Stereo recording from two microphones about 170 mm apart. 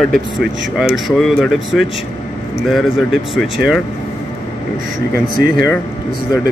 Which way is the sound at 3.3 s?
Centre (ahead or behind).